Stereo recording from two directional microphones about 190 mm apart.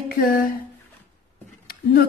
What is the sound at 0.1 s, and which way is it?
Speech, 50° left (ahead or behind).